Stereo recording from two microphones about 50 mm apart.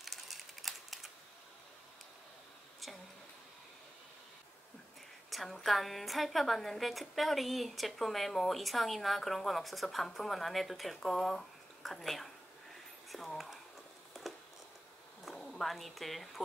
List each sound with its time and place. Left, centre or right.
0.0 s typing: centre
5.3 s a woman's voice: centre
13.1 s whispering: centre
14.2 s a sound: centre
15.3 s a sound: centre
15.7 s a woman's voice: centre